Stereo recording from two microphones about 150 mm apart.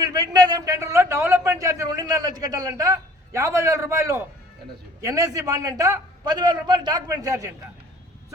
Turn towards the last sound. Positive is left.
turn(degrees=-20)  # may be behind; listen again after turning